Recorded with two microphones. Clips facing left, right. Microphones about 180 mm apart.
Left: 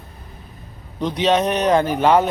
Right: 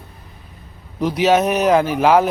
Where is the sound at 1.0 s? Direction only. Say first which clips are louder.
Right 3 dB; 5° right (ahead or behind).